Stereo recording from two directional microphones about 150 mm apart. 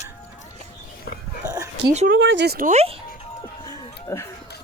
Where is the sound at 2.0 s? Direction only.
75° right (ahead or behind).